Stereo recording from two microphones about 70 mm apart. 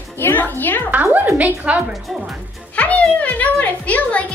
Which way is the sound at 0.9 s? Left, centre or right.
Right.